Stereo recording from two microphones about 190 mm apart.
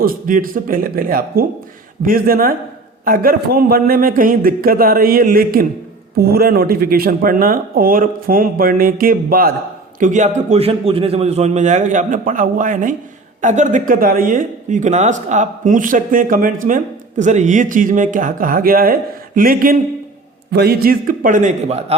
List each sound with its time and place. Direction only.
0.0 s a man's voice: 50° right (ahead or behind)